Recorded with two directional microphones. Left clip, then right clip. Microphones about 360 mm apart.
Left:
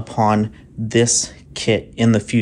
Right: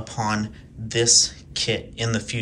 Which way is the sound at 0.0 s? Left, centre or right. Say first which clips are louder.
Left 9 dB; centre.